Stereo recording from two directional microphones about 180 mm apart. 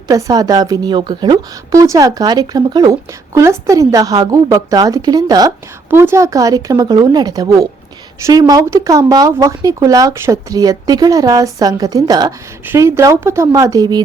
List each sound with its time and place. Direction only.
0.1 s a woman's voice: 20° right (ahead or behind)